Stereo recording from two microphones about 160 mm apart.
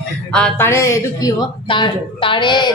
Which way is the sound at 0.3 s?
5° left (ahead or behind).